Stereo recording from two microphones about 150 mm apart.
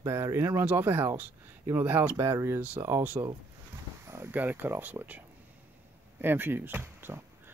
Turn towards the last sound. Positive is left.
turn(degrees=-15)  # may be behind; listen again after turning